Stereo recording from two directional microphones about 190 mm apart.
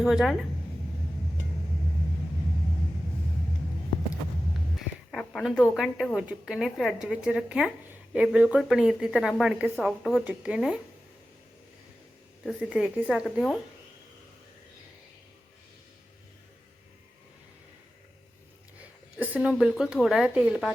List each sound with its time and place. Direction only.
0.0 s speech: centre (ahead or behind)
5.1 s a woman's voice: centre (ahead or behind)
12.5 s speech: 5° right (ahead or behind)
19.2 s speech: 10° right (ahead or behind)